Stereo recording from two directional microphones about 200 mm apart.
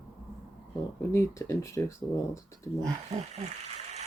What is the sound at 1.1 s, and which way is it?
Speech, 15° left (ahead or behind).